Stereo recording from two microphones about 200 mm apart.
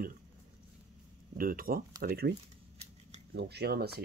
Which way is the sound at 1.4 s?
45° right (ahead or behind).